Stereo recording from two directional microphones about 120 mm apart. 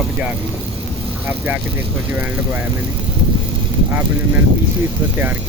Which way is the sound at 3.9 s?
15° right (ahead or behind).